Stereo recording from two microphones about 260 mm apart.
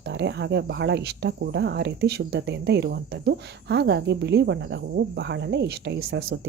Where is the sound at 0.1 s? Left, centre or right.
Right.